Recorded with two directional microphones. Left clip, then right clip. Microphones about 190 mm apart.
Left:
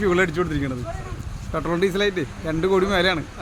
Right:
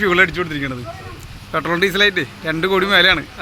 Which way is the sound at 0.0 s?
5° left (ahead or behind).